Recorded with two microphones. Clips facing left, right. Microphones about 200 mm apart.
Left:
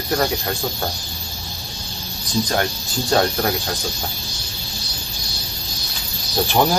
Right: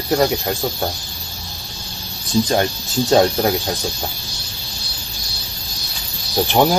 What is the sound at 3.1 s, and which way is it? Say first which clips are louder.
Speech: right 4 dB; 15° right (ahead or behind).